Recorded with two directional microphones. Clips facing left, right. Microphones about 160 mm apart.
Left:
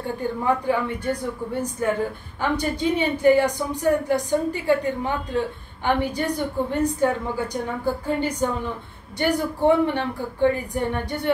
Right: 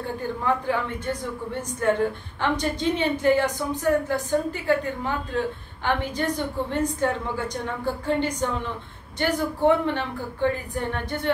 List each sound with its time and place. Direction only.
0.7 s a woman's voice: 10° left (ahead or behind)